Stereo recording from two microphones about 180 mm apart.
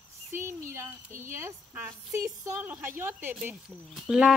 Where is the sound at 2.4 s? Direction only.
15° right (ahead or behind).